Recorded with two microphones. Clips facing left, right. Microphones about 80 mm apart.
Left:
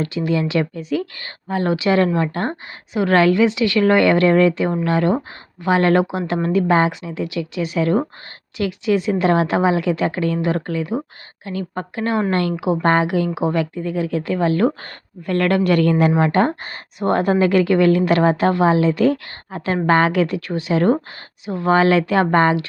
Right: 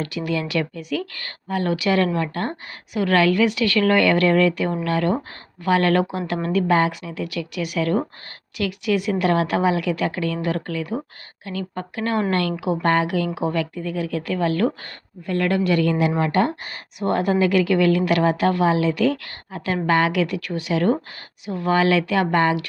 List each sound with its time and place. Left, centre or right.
0.0 s a woman's voice: left
15.3 s a woman's voice: left